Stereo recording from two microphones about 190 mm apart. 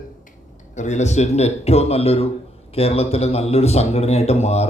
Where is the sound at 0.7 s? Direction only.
40° left (ahead or behind).